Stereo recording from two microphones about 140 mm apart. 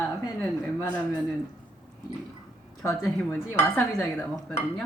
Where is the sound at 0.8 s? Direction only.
10° left (ahead or behind).